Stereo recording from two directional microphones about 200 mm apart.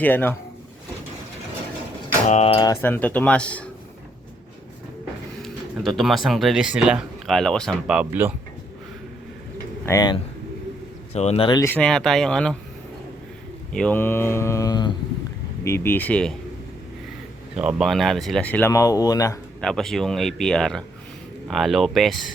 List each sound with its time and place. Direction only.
0.0 s speech: 10° left (ahead or behind)
2.2 s speech: 35° left (ahead or behind)
2.8 s speech: 10° left (ahead or behind)
5.4 s speech: centre (ahead or behind)
9.8 s speech: 15° left (ahead or behind)
11.1 s speech: 35° left (ahead or behind); by 12.5 s 5° left (ahead or behind)
13.7 s mantra: 5° left (ahead or behind)
15.6 s speech: 10° left (ahead or behind)
17.6 s speech: 5° right (ahead or behind); by 19.4 s 15° left (ahead or behind)
19.6 s speech: centre (ahead or behind)